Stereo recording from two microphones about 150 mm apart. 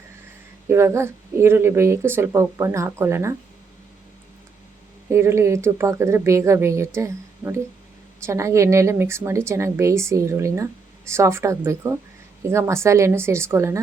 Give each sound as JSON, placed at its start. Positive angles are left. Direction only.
{"t": 0.7, "sound": "speech", "side_deg": -20}
{"t": 5.0, "sound": "a woman's voice", "side_deg": -15}